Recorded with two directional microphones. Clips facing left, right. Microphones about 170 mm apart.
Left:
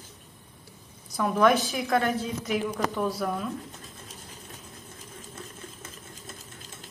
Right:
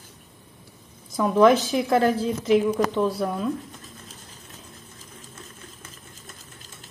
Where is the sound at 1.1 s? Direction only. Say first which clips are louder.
Right 5 dB; 25° right (ahead or behind).